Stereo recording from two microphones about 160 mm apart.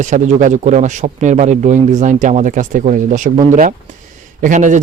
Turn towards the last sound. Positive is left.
turn(degrees=-50)  # may be behind; listen again after turning